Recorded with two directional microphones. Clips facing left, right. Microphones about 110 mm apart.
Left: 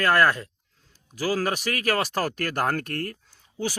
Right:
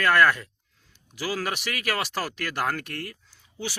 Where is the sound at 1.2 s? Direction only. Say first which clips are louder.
Left 4 dB; 40° left (ahead or behind).